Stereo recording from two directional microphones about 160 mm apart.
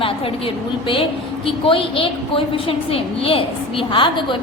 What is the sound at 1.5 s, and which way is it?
A woman's voice, 35° left (ahead or behind).